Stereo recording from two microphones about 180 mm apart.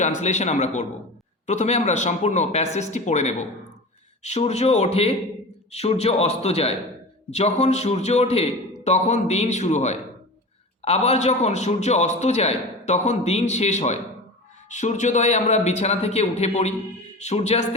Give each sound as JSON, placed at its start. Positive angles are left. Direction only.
{"t": 0.0, "sound": "a man's voice", "side_deg": 40}